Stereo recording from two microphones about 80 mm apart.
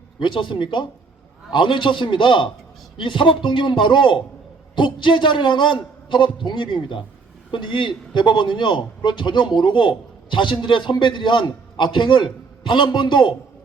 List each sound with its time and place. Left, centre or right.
0.2 s a man's voice: left
4.7 s a man's voice: left
11.0 s a man's voice: left